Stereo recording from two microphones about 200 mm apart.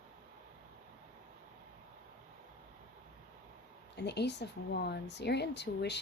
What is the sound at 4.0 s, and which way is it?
Speech, 55° left (ahead or behind).